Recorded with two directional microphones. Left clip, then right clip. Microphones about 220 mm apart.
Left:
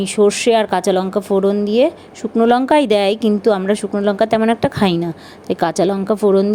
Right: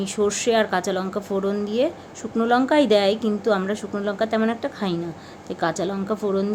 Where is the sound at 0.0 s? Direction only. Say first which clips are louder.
Left 8 dB; 25° left (ahead or behind).